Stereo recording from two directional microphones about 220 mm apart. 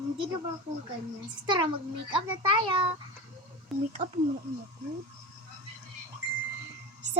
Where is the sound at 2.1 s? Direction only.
25° right (ahead or behind).